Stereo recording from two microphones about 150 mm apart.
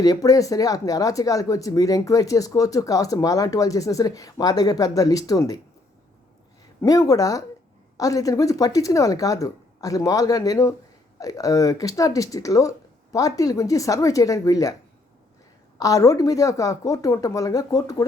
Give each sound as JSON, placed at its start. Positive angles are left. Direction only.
{"t": 0.0, "sound": "speech", "side_deg": 25}
{"t": 6.8, "sound": "speech", "side_deg": 25}
{"t": 15.8, "sound": "speech", "side_deg": 25}